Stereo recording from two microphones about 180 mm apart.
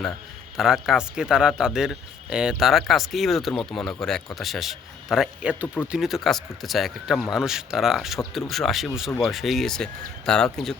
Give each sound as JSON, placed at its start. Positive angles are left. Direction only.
{"t": 0.5, "sound": "speech", "side_deg": 0}
{"t": 5.6, "sound": "speech", "side_deg": 10}